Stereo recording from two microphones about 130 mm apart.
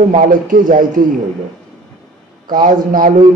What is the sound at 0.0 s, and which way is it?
A man's voice, 85° right.